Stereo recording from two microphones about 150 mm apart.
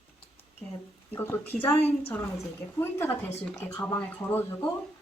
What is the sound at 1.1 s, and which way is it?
Speech, 15° left (ahead or behind).